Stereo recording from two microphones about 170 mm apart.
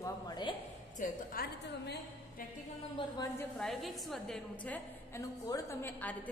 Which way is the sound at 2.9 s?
25° left (ahead or behind).